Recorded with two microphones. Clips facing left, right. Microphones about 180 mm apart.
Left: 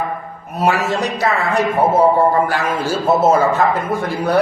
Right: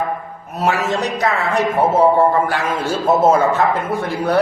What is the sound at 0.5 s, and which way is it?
A man's voice, 10° left (ahead or behind).